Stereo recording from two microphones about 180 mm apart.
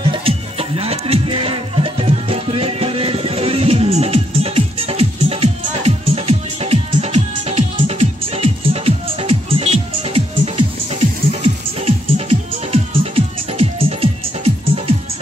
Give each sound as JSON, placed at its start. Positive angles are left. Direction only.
{"t": 0.0, "sound": "music", "side_deg": -30}